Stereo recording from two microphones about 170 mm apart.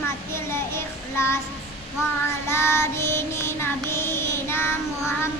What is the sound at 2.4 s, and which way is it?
Child singing, 15° left (ahead or behind).